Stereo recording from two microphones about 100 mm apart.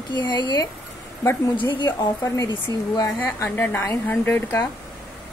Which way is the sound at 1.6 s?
50° left (ahead or behind).